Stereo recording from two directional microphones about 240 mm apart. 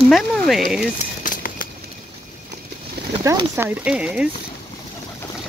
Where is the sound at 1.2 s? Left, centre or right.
Left.